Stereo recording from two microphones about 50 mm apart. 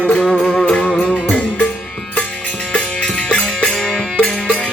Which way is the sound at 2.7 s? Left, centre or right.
Left.